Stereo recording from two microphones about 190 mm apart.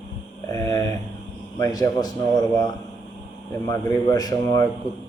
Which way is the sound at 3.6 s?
20° left (ahead or behind).